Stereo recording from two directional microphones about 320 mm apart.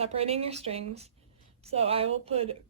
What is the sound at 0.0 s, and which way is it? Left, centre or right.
Speech, centre.